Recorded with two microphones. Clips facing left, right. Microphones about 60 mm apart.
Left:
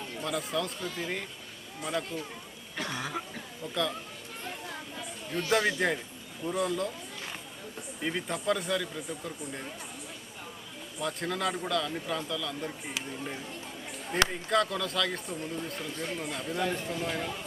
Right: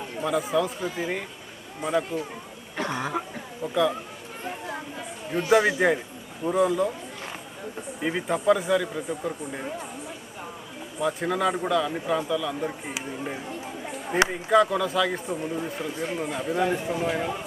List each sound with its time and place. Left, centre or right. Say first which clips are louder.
0.2 s speech: right 8 dB; centre
2.7 s cough: right 7 dB; right
4.7 s a sound: right 6 dB; right
6.4 s speech: right 8 dB; centre
8.0 s speech: right 8 dB; centre
11.0 s speech: right 7 dB; centre